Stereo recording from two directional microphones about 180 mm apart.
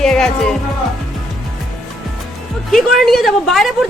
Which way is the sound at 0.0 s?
5° left (ahead or behind).